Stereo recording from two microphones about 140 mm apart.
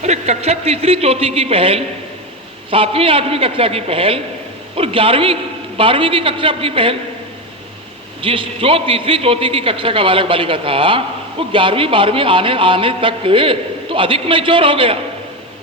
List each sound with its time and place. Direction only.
0.0 s a man's voice: 50° right (ahead or behind)
8.2 s a man's voice: 40° right (ahead or behind)